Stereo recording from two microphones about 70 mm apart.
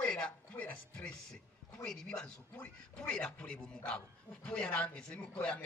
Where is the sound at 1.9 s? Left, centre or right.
Centre.